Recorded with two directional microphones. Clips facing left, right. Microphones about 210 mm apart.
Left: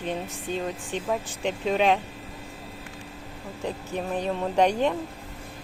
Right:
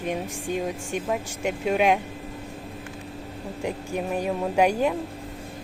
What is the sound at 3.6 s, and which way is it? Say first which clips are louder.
A woman's voice: right 2 dB; 10° right (ahead or behind).